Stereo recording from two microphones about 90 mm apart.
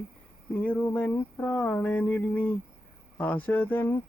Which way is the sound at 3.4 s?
20° left (ahead or behind).